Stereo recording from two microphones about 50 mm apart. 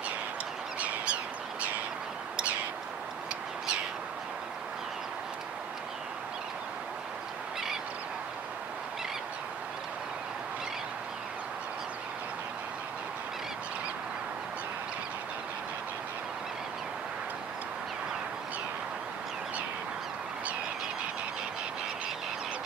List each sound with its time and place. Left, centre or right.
0.7 s bird: right